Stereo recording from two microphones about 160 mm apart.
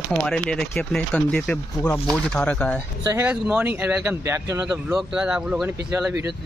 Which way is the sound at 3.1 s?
10° right (ahead or behind).